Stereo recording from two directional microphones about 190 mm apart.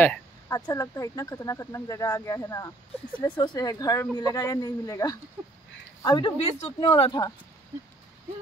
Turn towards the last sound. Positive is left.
turn(degrees=20)  # may be behind; listen again after turning